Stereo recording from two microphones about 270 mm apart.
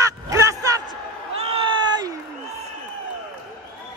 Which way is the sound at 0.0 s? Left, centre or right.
Centre.